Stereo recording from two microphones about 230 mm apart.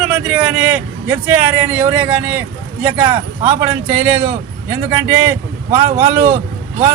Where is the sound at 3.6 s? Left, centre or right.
Centre.